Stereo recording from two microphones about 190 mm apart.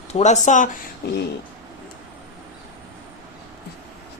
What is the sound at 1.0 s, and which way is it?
Speech, 60° left (ahead or behind).